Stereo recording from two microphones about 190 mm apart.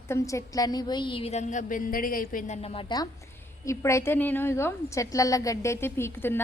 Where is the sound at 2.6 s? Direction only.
30° left (ahead or behind).